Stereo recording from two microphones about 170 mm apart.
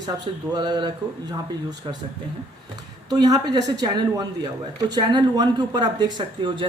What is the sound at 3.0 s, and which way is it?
Speech, 20° right (ahead or behind).